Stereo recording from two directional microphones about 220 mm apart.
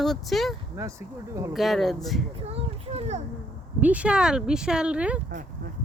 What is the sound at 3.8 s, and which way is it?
Speech, 5° right (ahead or behind).